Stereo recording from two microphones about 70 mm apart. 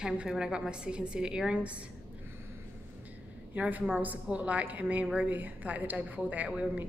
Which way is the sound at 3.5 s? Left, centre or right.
Right.